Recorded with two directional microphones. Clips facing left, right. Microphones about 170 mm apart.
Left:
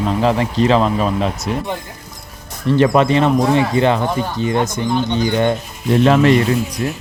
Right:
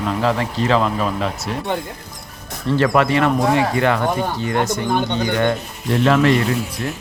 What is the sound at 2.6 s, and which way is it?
Speech, 20° left (ahead or behind).